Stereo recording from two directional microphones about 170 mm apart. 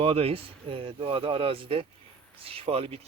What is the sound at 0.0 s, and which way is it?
Speech, 35° right (ahead or behind).